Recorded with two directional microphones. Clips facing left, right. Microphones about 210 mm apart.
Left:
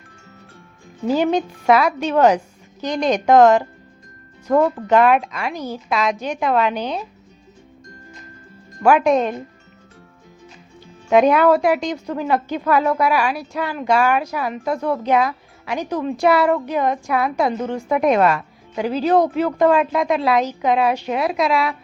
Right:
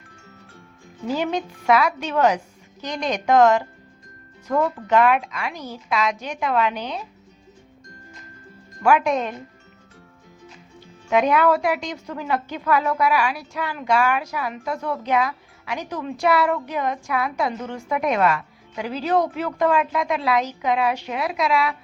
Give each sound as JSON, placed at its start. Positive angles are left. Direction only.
{"t": 1.0, "sound": "a woman's voice", "side_deg": 35}
{"t": 8.8, "sound": "a woman's voice", "side_deg": 35}
{"t": 11.1, "sound": "a woman's voice", "side_deg": 35}